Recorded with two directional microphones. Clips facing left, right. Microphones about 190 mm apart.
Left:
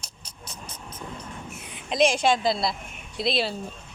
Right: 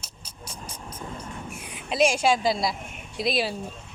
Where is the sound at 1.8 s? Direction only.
5° right (ahead or behind).